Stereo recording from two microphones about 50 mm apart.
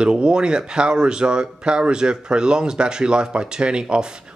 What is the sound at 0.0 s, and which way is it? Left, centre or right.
Speech, centre.